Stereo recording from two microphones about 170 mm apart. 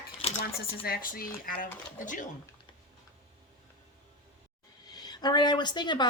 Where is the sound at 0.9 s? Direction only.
60° left (ahead or behind).